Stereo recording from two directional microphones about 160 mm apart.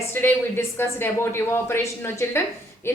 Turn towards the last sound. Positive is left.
turn(degrees=15)  # may be behind; listen again after turning